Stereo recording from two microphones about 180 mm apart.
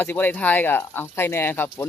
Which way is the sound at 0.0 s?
10° left (ahead or behind).